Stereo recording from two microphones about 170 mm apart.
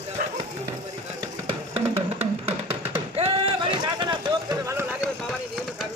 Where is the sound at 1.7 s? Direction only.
40° right (ahead or behind).